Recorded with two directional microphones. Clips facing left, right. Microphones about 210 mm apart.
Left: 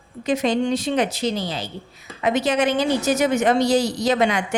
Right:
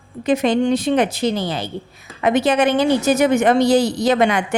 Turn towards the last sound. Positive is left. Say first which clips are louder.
# right 3 dB
turn(degrees=-55)  # may be behind; listen again after turning